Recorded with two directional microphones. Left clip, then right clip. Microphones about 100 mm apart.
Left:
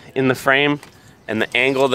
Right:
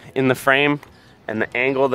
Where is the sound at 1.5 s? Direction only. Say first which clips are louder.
Left 2 dB; 55° left (ahead or behind).